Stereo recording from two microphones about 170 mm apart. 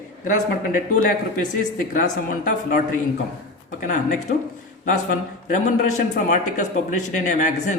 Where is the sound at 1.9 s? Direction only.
50° left (ahead or behind).